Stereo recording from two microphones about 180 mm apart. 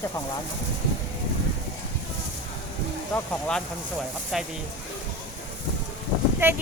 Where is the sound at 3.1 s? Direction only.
5° left (ahead or behind).